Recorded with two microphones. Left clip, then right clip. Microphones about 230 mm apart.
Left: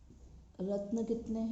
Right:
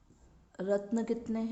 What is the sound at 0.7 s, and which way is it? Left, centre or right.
Speech, right.